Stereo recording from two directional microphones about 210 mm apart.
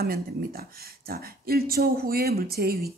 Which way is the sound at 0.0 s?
45° right (ahead or behind).